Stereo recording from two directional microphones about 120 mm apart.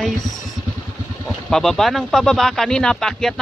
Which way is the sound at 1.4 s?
5° left (ahead or behind).